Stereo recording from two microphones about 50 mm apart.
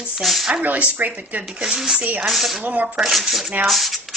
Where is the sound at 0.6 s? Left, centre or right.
Right.